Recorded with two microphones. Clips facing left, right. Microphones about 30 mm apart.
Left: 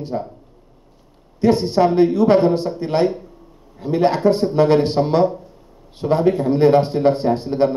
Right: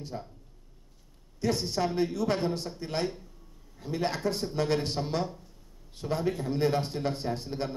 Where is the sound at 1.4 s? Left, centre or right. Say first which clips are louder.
Left 14 dB; left.